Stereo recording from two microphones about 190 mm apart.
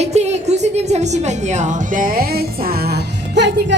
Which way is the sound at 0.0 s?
35° right (ahead or behind).